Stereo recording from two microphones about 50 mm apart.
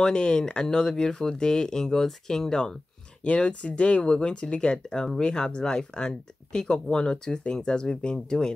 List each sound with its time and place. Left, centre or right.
0.0 s speech: centre